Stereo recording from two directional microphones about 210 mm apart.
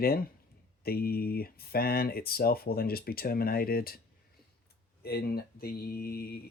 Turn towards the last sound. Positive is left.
turn(degrees=50)  # may be behind; listen again after turning